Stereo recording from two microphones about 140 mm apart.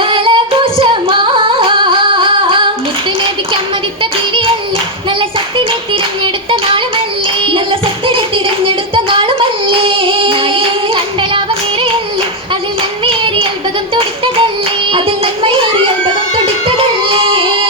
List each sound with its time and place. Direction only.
0.0 s singing: 40° right (ahead or behind)
5.9 s clapping: 35° right (ahead or behind)
7.4 s music: 40° right (ahead or behind)
8.6 s singing: 40° right (ahead or behind)
11.2 s music: 35° right (ahead or behind)
13.1 s clapping: 40° right (ahead or behind)
14.9 s music: 40° right (ahead or behind)